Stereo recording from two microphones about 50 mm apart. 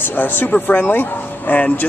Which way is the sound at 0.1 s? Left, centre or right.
Left.